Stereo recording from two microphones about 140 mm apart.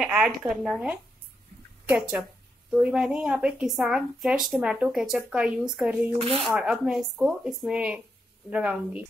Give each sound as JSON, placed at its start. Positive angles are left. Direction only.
{"t": 0.0, "sound": "speech", "side_deg": -5}
{"t": 6.1, "sound": "speech", "side_deg": -45}
{"t": 6.4, "sound": "speech", "side_deg": -5}